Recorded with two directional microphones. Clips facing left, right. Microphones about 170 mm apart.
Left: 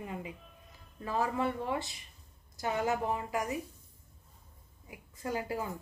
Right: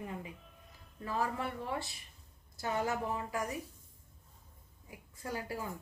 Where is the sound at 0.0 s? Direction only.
15° left (ahead or behind).